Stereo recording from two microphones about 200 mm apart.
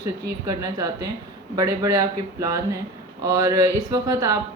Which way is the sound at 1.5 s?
15° right (ahead or behind).